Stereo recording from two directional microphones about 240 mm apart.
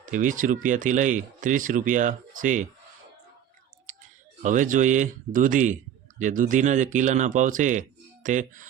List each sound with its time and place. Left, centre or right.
0.0 s speech: right
4.4 s speech: right